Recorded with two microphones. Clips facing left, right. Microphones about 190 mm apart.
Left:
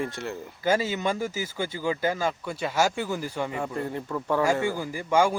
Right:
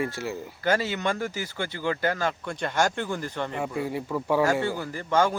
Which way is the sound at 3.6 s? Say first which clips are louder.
Right 1 dB; 5° right (ahead or behind).